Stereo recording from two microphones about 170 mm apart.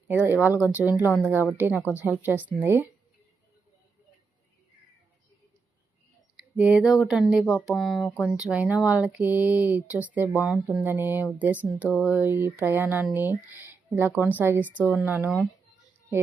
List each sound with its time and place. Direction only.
0.1 s speech: 10° right (ahead or behind)
6.6 s speech: 5° right (ahead or behind)
8.0 s speech: 15° left (ahead or behind)
8.4 s speech: 5° right (ahead or behind)